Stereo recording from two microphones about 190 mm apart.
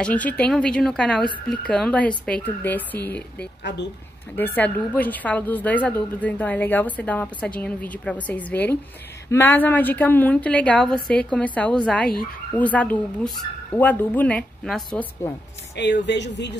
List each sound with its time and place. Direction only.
0.0 s a woman's voice: 5° left (ahead or behind)
3.6 s speech: 65° left (ahead or behind)
4.4 s a woman's voice: 10° left (ahead or behind)
15.7 s speech: 65° left (ahead or behind)